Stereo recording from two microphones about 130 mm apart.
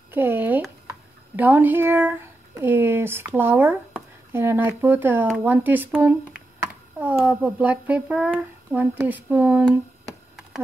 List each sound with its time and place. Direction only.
0.1 s speech: 15° right (ahead or behind)
7.2 s speech: 15° right (ahead or behind)